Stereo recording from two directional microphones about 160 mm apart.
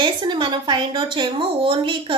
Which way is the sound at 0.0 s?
30° right (ahead or behind).